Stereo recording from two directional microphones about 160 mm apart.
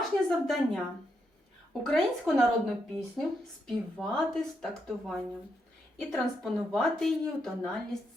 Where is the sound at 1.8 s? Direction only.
Centre (ahead or behind).